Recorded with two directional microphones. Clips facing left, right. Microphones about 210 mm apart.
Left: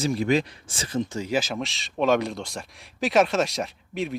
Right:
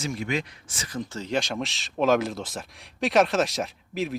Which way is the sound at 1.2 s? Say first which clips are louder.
Left 1 dB; 5° left (ahead or behind).